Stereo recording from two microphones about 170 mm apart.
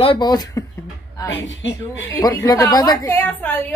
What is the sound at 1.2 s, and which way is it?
Speech, 90° left.